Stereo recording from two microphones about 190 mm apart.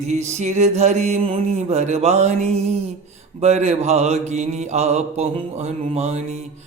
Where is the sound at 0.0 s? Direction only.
35° right (ahead or behind).